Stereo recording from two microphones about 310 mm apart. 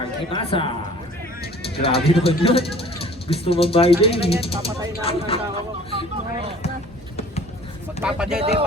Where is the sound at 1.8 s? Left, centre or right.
Centre.